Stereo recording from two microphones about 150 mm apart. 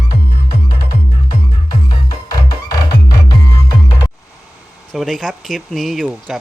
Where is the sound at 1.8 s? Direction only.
25° left (ahead or behind).